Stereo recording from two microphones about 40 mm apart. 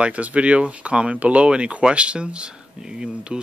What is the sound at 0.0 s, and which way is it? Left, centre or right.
Speech, right.